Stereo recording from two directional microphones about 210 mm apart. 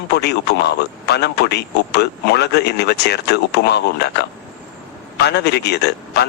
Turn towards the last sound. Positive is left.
turn(degrees=55)  # may be behind; listen again after turning